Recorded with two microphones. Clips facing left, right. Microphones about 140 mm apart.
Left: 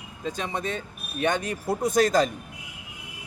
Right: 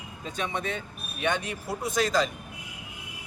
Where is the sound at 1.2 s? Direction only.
45° left (ahead or behind).